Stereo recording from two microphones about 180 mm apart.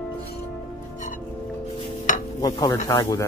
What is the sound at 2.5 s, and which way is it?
Speech, 25° left (ahead or behind).